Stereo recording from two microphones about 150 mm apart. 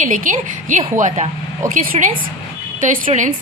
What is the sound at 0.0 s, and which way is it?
A woman's voice, 60° right (ahead or behind).